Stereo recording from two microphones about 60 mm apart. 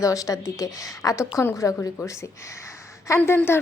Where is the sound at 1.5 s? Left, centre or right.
Left.